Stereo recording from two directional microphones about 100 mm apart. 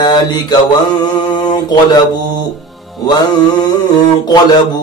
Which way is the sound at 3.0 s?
45° left (ahead or behind).